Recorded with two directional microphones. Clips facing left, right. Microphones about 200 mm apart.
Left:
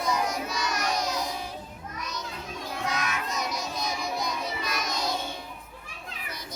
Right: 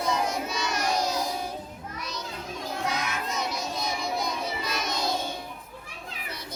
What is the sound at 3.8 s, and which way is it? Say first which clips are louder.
Children playing: right 2 dB; 25° right (ahead or behind).